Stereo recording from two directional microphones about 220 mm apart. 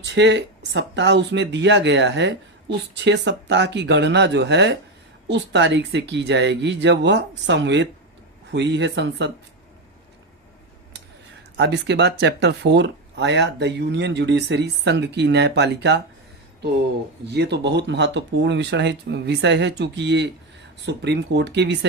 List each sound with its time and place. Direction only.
0.0 s speech: 55° right (ahead or behind)
11.5 s speech: 50° right (ahead or behind)
17.2 s speech: 50° right (ahead or behind)